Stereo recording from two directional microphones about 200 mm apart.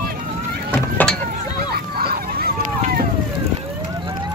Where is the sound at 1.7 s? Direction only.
50° right (ahead or behind).